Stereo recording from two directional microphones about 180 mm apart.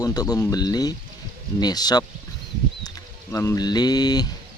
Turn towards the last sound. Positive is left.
turn(degrees=20)  # may be behind; listen again after turning